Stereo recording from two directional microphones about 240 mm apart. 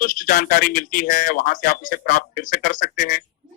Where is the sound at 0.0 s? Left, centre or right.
Left.